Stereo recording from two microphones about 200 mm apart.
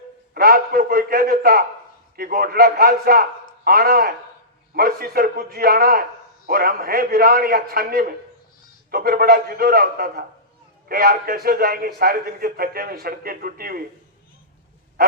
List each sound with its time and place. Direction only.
0.3 s a man's voice: 50° right (ahead or behind)